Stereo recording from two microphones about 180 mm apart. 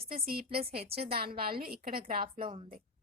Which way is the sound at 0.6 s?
35° right (ahead or behind).